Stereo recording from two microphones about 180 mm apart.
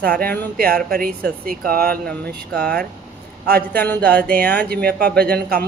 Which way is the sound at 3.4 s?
60° right (ahead or behind).